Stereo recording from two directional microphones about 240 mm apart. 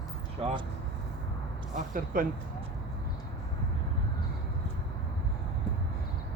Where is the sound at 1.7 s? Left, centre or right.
Right.